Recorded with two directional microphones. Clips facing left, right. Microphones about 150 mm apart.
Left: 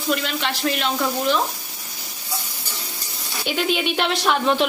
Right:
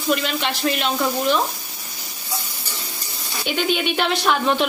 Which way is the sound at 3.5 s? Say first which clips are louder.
Right 1 dB; centre (ahead or behind).